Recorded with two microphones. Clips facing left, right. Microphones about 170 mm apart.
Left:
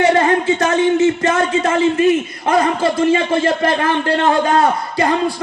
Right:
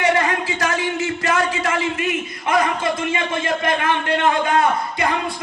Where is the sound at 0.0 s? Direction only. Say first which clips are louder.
Left 6 dB; 30° left (ahead or behind).